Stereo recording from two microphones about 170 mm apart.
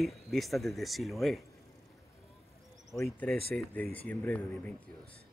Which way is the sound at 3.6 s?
5° left (ahead or behind).